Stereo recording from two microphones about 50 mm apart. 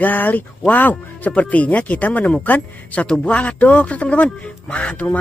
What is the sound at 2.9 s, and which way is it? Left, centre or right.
Music, centre.